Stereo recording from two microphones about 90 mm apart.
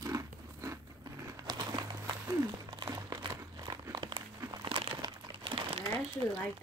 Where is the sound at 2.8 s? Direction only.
45° right (ahead or behind); by 5.9 s 75° right (ahead or behind).